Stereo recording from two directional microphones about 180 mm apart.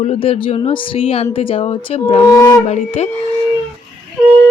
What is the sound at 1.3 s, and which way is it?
Wind instrument, 30° left (ahead or behind).